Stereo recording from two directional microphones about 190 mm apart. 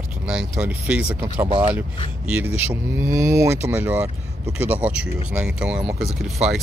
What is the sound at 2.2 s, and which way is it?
Speech, 10° right (ahead or behind).